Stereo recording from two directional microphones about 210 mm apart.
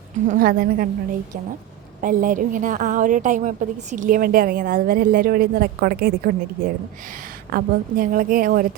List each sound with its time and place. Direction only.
0.3 s a woman's voice: 45° right (ahead or behind)
2.0 s a woman's voice: 40° right (ahead or behind)
7.5 s a woman's voice: 40° right (ahead or behind)